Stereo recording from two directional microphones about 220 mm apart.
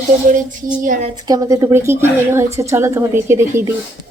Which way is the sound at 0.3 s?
35° right (ahead or behind).